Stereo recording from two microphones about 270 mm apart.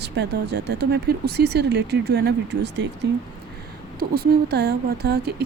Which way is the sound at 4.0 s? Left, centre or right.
Right.